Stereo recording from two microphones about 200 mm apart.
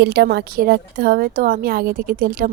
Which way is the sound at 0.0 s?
55° right (ahead or behind).